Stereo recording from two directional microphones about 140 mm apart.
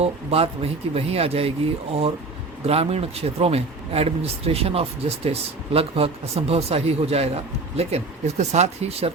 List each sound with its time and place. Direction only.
0.0 s speech: 45° right (ahead or behind)
2.6 s speech: 45° right (ahead or behind)